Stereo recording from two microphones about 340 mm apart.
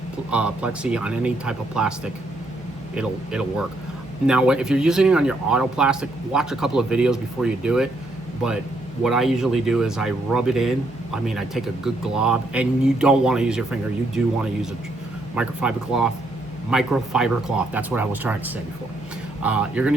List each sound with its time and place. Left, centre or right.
0.3 s speech: centre
2.9 s speech: centre
9.0 s speech: centre
15.4 s speech: centre